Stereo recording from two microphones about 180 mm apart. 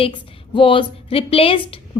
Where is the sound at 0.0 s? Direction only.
30° left (ahead or behind).